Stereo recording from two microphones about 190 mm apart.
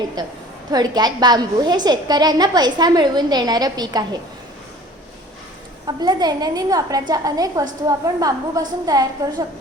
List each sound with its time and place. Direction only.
0.2 s a woman's voice: 20° right (ahead or behind)
5.8 s a woman's voice: 20° right (ahead or behind)